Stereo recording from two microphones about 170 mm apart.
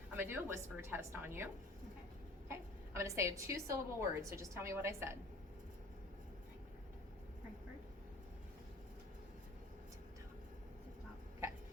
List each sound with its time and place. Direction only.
0.1 s a woman's voice: 10° right (ahead or behind)
2.5 s a woman's voice: 15° right (ahead or behind)